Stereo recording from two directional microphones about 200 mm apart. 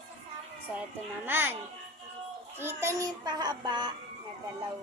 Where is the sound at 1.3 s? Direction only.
10° right (ahead or behind).